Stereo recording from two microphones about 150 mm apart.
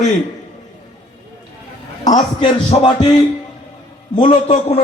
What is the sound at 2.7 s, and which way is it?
Speech, 50° left (ahead or behind).